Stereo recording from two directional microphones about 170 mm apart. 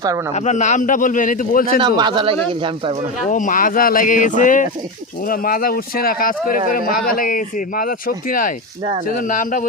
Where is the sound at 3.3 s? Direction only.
50° left (ahead or behind).